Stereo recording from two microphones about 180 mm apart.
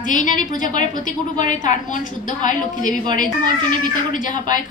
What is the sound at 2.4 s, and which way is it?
Speech, 45° left (ahead or behind).